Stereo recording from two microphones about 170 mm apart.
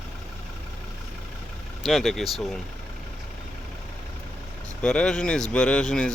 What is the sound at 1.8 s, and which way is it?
Speech, centre (ahead or behind).